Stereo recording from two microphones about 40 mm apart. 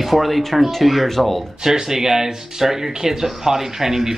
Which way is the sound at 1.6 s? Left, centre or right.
Centre.